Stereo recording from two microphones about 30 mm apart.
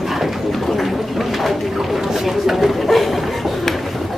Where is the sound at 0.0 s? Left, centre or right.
Centre.